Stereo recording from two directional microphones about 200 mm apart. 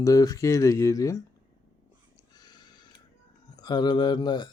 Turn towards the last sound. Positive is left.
turn(degrees=20)  # may be behind; listen again after turning